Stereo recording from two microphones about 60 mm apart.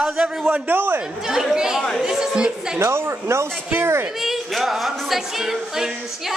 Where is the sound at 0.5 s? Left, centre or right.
Right.